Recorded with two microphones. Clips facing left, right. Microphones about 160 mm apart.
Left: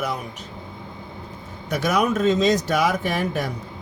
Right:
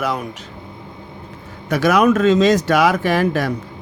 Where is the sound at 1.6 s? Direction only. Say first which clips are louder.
Right 7 dB; 90° right.